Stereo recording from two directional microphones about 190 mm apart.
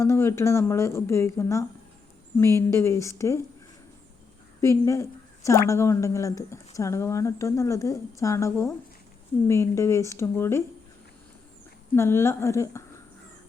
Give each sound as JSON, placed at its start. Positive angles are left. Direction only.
{"t": 0.0, "sound": "a woman's voice", "side_deg": 15}
{"t": 4.6, "sound": "a woman's voice", "side_deg": 15}
{"t": 11.9, "sound": "a woman's voice", "side_deg": 15}